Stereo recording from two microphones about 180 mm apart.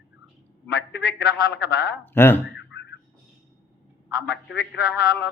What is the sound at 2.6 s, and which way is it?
Boing, 80° left.